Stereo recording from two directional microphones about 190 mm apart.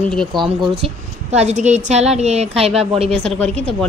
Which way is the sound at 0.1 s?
5° left (ahead or behind).